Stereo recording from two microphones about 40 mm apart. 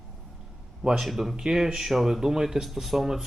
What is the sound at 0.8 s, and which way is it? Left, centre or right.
Speech, centre.